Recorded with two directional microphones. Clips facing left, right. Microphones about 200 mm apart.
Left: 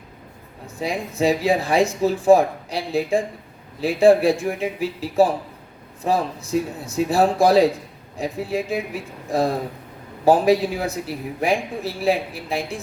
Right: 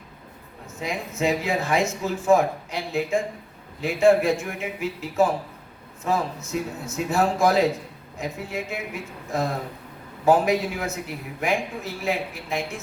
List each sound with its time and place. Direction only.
0.8 s a man's voice: 35° left (ahead or behind)